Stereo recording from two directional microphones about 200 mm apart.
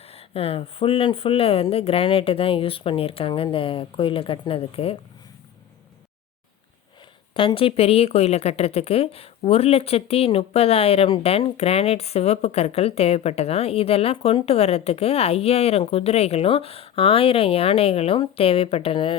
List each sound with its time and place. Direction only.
0.0 s a woman's voice: 30° left (ahead or behind)
7.3 s a woman's voice: 25° left (ahead or behind)